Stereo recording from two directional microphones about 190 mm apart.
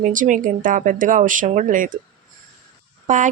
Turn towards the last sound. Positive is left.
turn(degrees=-40)  # may be behind; listen again after turning